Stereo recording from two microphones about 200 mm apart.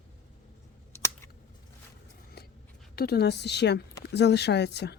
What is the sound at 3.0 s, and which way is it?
A woman's voice, 55° left (ahead or behind).